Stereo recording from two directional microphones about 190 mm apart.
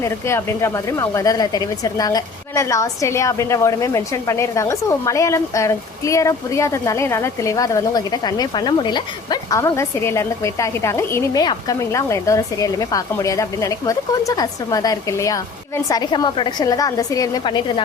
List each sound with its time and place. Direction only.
0.0 s speech: 15° left (ahead or behind)